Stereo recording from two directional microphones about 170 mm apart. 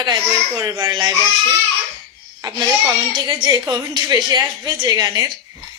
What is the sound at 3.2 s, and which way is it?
A woman's voice, 25° right (ahead or behind).